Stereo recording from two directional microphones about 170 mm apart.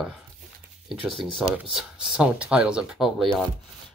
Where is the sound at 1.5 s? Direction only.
5° right (ahead or behind).